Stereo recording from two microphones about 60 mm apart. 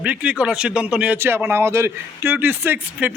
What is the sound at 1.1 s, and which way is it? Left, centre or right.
Speech, right.